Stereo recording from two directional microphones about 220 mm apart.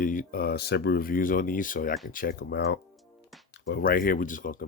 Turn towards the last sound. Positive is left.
turn(degrees=40)  # may be behind; listen again after turning